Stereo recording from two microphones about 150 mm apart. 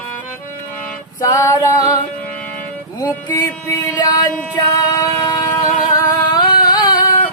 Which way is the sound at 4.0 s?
25° left (ahead or behind).